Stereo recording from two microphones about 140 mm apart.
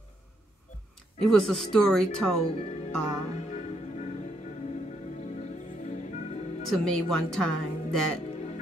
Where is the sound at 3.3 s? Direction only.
55° left (ahead or behind).